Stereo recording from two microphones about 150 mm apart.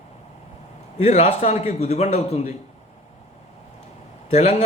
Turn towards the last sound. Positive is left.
turn(degrees=50)  # may be behind; listen again after turning